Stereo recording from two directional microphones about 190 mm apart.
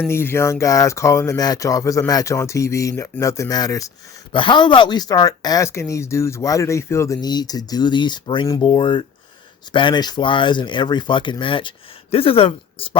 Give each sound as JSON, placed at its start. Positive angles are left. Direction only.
{"t": 0.0, "sound": "speech", "side_deg": 10}